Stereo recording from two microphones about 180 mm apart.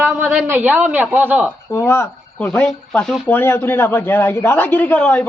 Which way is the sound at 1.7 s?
15° left (ahead or behind).